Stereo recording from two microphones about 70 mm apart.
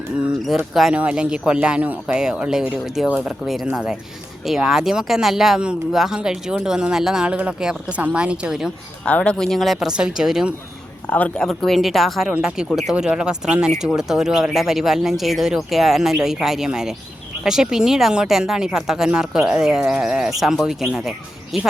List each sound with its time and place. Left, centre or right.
0.7 s speech: centre
0.9 s speech: centre
2.1 s speech: centre
9.0 s speech: centre
9.9 s speech: centre
11.3 s speech: centre
12.3 s speech: centre